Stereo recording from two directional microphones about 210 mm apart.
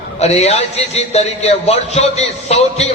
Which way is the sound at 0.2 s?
30° left (ahead or behind).